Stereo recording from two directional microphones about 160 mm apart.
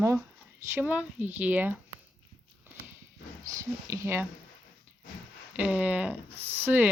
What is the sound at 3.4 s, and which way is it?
Speech, 20° right (ahead or behind).